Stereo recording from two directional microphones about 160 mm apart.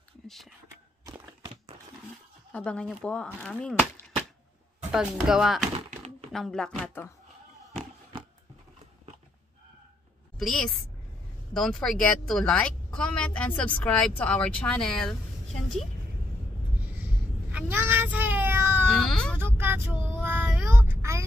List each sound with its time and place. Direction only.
0.3 s a sound: centre (ahead or behind)
1.0 s a sound: 20° right (ahead or behind)
2.5 s speech: 5° left (ahead or behind)
10.4 s speech: centre (ahead or behind)
16.9 s child singing: 10° right (ahead or behind)
18.9 s baby cry: 5° left (ahead or behind)
19.3 s child singing: 15° right (ahead or behind)